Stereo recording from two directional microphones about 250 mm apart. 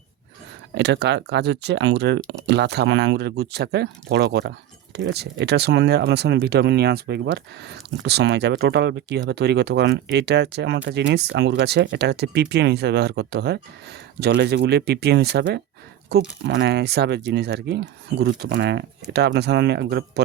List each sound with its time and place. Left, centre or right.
0.7 s speech: right